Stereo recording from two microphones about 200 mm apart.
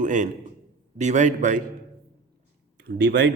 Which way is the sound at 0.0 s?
40° right (ahead or behind).